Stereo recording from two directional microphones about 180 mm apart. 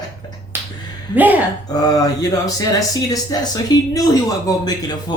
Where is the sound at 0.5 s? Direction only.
10° right (ahead or behind).